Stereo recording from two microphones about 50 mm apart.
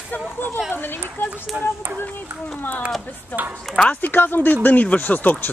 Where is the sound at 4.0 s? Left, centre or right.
Left.